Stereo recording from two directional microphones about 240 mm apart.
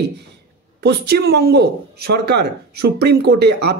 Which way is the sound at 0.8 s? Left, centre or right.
Right.